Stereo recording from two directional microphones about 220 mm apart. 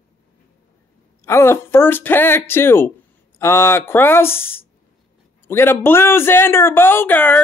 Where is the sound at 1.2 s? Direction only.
10° left (ahead or behind).